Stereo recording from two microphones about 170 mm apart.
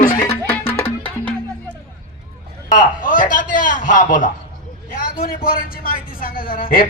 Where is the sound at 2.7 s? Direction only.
55° left (ahead or behind).